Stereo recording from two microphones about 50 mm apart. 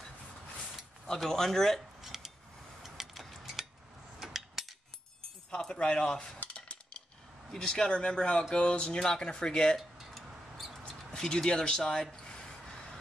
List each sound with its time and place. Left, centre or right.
1.2 s speech: centre
2.0 s a sound: centre
5.5 s cutlery: centre
6.5 s dishes: left
7.5 s speech: centre
9.8 s mouse: centre
11.1 s a sound: centre